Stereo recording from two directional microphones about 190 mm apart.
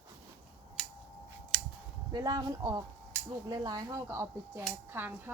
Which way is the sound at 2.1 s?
20° right (ahead or behind).